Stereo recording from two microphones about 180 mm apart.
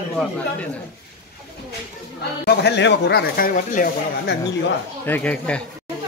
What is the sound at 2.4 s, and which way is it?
Speech, 70° left (ahead or behind).